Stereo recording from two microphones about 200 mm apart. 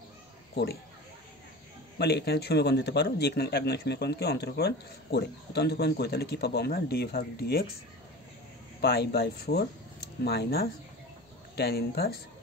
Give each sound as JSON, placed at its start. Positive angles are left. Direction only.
{"t": 2.0, "sound": "speech", "side_deg": 55}
{"t": 8.8, "sound": "speech", "side_deg": 50}